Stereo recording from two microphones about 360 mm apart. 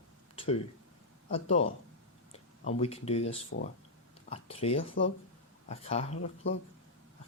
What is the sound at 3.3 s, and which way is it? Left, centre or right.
Speech, left.